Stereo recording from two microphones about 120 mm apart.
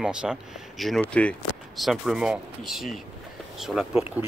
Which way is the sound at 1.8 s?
Centre (ahead or behind).